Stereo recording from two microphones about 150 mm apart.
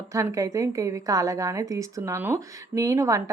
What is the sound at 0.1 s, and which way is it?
A woman's voice, 20° right (ahead or behind).